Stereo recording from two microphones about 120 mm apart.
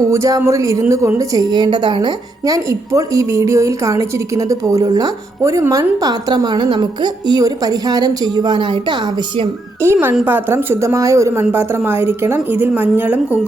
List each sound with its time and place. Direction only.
0.1 s a woman's voice: 25° right (ahead or behind)
9.8 s a woman's voice: 20° right (ahead or behind)